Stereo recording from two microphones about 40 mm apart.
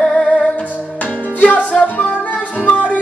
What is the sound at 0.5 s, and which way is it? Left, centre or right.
Music, left.